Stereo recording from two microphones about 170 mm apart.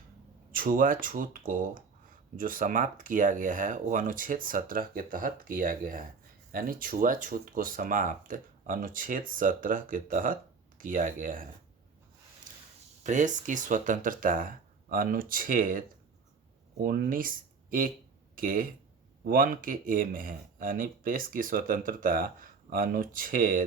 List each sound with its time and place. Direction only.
0.5 s speech: 55° right (ahead or behind)
13.0 s speech: 45° right (ahead or behind)